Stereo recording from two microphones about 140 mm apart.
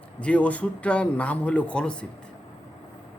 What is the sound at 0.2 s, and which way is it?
A man's voice, 10° left (ahead or behind).